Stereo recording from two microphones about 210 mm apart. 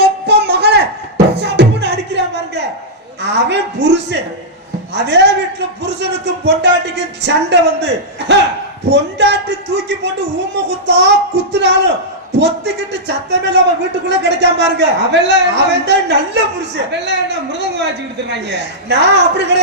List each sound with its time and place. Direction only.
0.0 s music: 50° right (ahead or behind)
3.2 s a man's voice: 55° right (ahead or behind)